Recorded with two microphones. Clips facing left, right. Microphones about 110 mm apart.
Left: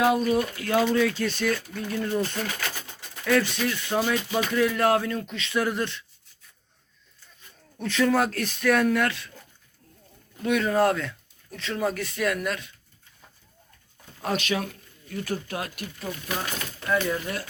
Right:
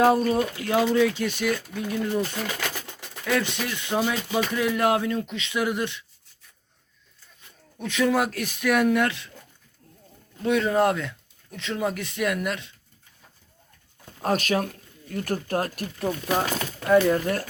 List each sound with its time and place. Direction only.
0.0 s speech: 35° right (ahead or behind)
0.3 s speech: 20° right (ahead or behind)
3.2 s speech: 20° right (ahead or behind)
7.8 s speech: 15° right (ahead or behind)
10.4 s speech: 25° right (ahead or behind)
14.2 s speech: 45° right (ahead or behind)